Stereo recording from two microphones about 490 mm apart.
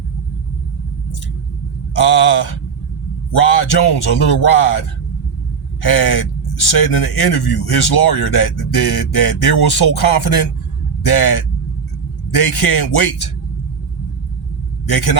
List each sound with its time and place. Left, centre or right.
2.0 s speech: left
14.8 s speech: left